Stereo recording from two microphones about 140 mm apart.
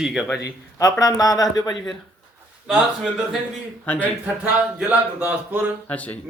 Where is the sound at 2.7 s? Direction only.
5° right (ahead or behind).